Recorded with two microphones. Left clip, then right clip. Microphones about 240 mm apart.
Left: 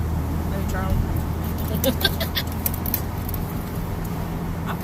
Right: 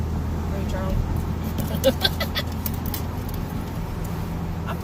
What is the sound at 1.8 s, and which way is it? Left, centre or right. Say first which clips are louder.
Speech: right 2 dB; right.